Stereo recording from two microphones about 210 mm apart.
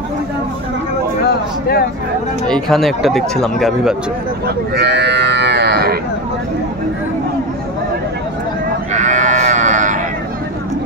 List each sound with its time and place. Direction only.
1.2 s a sound: 45° left (ahead or behind)
2.4 s speech: centre (ahead or behind)
4.7 s livestock: 55° right (ahead or behind)
8.9 s sheep: 35° right (ahead or behind)